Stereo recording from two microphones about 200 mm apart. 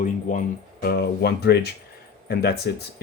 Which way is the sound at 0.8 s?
55° left (ahead or behind).